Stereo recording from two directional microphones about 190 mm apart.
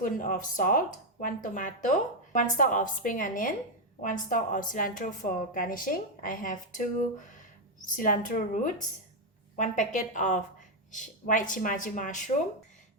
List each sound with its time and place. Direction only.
0.0 s speech: 45° left (ahead or behind)
7.9 s a woman's voice: 45° left (ahead or behind)